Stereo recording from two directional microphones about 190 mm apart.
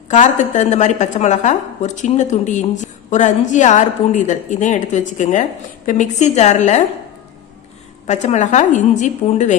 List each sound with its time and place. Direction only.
0.1 s a woman's voice: 40° left (ahead or behind)
8.0 s a woman's voice: 35° left (ahead or behind)